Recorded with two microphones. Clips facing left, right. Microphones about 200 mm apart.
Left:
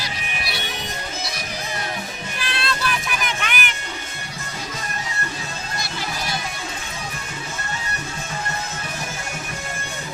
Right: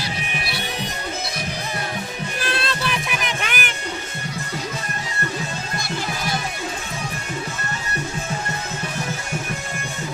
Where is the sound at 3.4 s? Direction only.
40° right (ahead or behind).